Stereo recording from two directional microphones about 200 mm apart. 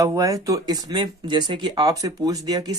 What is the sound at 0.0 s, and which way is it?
Speech, 15° right (ahead or behind).